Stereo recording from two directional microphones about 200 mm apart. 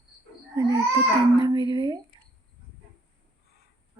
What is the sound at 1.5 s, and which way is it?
Female singing, 25° right (ahead or behind).